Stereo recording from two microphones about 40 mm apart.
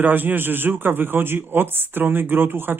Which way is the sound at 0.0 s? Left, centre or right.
Right.